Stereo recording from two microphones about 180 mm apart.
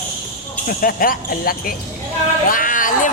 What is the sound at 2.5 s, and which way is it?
Music, 50° left (ahead or behind).